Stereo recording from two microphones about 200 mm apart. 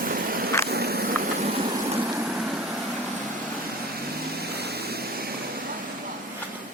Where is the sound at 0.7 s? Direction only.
50° right (ahead or behind).